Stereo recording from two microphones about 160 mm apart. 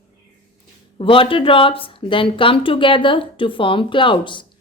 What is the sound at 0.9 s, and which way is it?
Speech, 35° left (ahead or behind).